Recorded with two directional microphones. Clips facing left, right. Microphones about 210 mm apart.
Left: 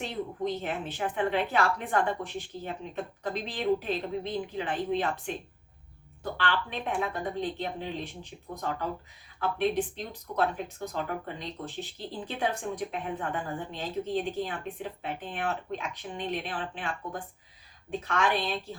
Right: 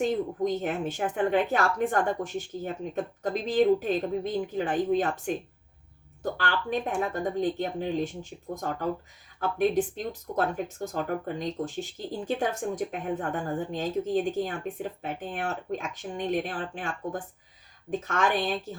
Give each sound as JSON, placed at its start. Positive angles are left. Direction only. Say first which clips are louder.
{"t": 0.0, "sound": "speech", "louder": "right 6 dB", "side_deg": -45}